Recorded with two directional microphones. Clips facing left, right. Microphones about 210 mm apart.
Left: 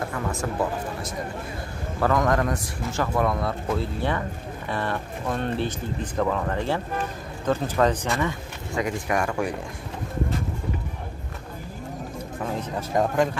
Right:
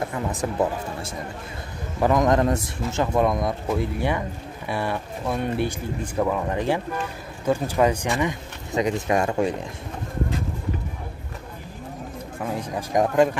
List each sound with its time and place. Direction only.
0.1 s speech: 20° right (ahead or behind)
12.5 s speech: 15° right (ahead or behind)